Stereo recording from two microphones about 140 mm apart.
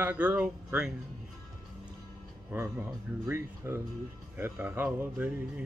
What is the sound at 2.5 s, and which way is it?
Speech, 20° right (ahead or behind).